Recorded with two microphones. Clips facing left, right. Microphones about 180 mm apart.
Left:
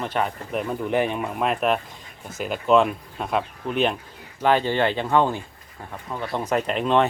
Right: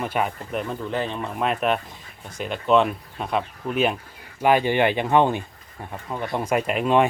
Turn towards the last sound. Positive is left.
turn(degrees=-10)  # may be behind; listen again after turning